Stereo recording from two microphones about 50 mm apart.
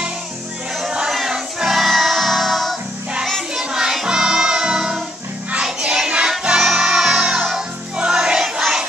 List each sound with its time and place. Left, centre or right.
0.9 s music: centre